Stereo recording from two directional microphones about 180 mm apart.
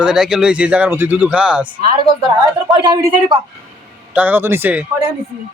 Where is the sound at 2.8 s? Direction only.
25° right (ahead or behind).